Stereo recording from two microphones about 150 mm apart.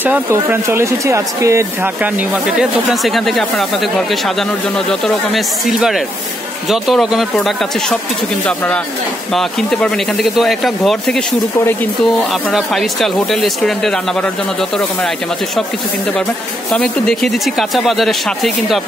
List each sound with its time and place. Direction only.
0.0 s speech: 15° right (ahead or behind)
2.3 s speech: 5° right (ahead or behind)
12.4 s speech: centre (ahead or behind)
16.7 s speech: 5° left (ahead or behind)